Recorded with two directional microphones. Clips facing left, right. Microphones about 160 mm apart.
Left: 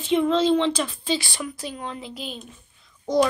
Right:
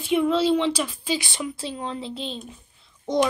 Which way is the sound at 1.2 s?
20° right (ahead or behind).